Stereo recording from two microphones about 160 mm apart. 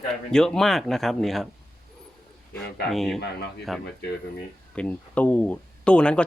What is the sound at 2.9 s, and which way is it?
Speech, centre (ahead or behind).